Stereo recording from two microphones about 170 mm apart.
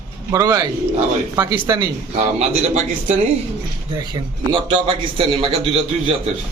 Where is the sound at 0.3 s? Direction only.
20° right (ahead or behind).